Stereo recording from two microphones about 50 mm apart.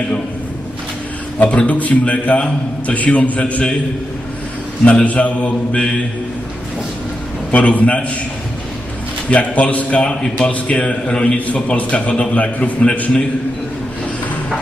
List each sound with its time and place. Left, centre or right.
1.4 s a man's voice: left
4.9 s a man's voice: left
7.5 s a man's voice: left
9.3 s a man's voice: left